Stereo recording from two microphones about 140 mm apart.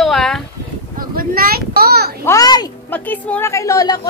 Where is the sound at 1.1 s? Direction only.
90° right.